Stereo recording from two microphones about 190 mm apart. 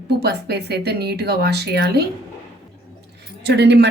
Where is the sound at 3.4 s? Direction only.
60° right (ahead or behind).